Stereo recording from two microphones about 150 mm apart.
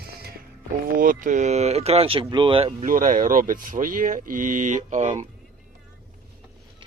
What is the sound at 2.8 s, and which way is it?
Speech, 65° right (ahead or behind).